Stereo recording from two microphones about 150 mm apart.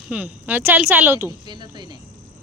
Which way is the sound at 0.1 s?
10° right (ahead or behind).